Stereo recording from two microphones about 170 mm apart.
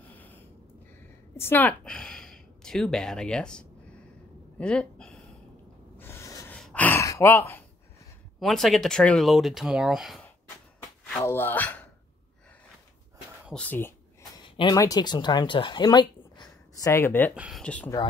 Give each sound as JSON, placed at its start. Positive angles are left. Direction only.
{"t": 0.0, "sound": "snort", "side_deg": 10}
{"t": 1.3, "sound": "a woman's voice", "side_deg": 15}
{"t": 4.6, "sound": "a sound", "side_deg": 5}
{"t": 6.5, "sound": "gasp", "side_deg": 5}
{"t": 8.4, "sound": "speech", "side_deg": 0}
{"t": 11.1, "sound": "speech", "side_deg": 10}
{"t": 13.5, "sound": "speech", "side_deg": 10}
{"t": 14.6, "sound": "speech", "side_deg": 20}
{"t": 17.4, "sound": "speech", "side_deg": 0}